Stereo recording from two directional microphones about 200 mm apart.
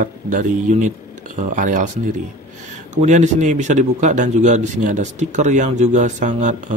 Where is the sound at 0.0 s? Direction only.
40° right (ahead or behind).